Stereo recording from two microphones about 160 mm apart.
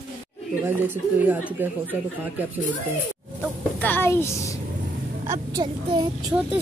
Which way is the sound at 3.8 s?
10° left (ahead or behind).